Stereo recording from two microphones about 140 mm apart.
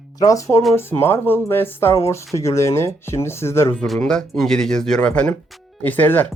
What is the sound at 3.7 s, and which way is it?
Speech, 5° left (ahead or behind).